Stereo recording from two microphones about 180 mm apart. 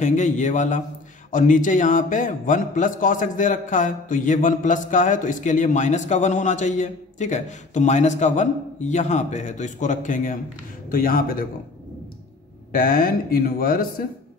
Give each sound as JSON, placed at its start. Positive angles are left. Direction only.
{"t": 0.0, "sound": "a man's voice", "side_deg": 45}
{"t": 12.7, "sound": "a man's voice", "side_deg": 55}